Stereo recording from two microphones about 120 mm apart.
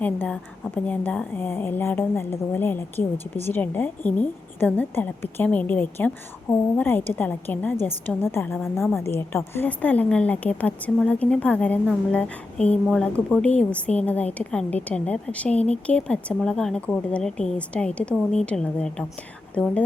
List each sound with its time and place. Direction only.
0.0 s a woman's voice: 10° left (ahead or behind)